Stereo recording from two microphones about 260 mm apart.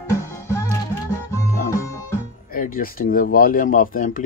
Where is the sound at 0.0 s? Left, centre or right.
Centre.